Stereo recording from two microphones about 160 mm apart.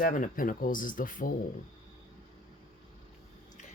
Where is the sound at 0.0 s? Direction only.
55° left (ahead or behind).